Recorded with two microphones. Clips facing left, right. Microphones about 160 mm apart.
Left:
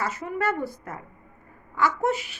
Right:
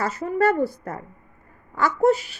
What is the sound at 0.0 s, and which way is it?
Speech, 35° right (ahead or behind).